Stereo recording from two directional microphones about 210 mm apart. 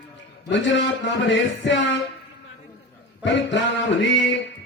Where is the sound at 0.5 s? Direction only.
60° left (ahead or behind).